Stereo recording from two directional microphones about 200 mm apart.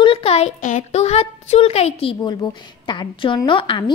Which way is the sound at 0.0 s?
30° left (ahead or behind).